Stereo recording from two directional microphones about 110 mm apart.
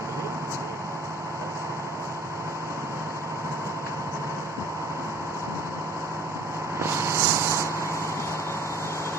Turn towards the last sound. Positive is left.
turn(degrees=-25)  # may be behind; listen again after turning